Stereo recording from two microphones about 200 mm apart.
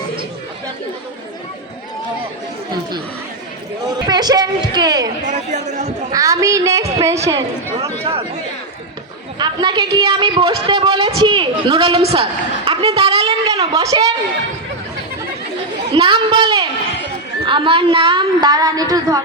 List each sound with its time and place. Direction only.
4.0 s a woman's voice: 20° right (ahead or behind)
5.2 s a woman's voice: 35° right (ahead or behind)
6.1 s a woman's voice: 15° right (ahead or behind)
9.4 s a woman's voice: 20° right (ahead or behind)
13.7 s a woman's voice: 15° right (ahead or behind)
16.0 s a woman's voice: 25° right (ahead or behind)